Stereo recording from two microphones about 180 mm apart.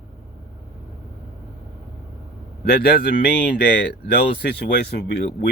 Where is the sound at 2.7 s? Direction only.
55° left (ahead or behind).